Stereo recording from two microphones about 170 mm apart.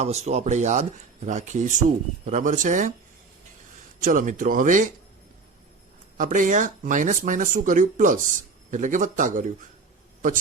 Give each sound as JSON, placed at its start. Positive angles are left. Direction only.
{"t": 0.0, "sound": "speech", "side_deg": -40}
{"t": 4.0, "sound": "speech", "side_deg": -50}
{"t": 6.1, "sound": "speech", "side_deg": -50}